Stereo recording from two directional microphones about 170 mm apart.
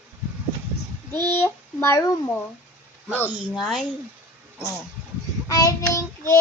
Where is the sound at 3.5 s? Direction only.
5° left (ahead or behind).